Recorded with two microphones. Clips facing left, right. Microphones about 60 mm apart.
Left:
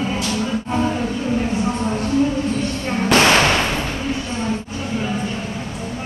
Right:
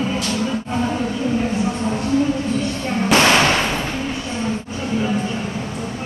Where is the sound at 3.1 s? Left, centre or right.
Centre.